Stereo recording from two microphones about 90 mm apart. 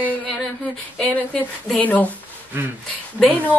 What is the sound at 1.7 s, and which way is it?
Music, 15° left (ahead or behind).